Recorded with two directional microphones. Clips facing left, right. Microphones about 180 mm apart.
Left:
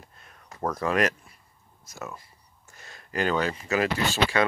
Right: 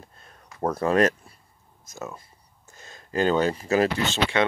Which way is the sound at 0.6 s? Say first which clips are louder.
Right 4 dB; 30° right (ahead or behind).